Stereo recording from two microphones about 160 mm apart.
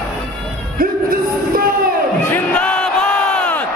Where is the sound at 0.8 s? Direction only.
65° right (ahead or behind).